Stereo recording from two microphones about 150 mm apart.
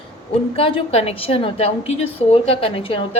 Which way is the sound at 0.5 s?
40° left (ahead or behind).